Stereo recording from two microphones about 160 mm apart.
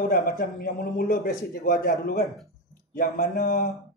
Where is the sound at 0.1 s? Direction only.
65° left (ahead or behind).